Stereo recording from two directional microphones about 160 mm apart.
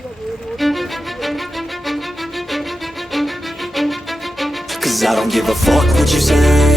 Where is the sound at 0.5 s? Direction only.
Centre (ahead or behind).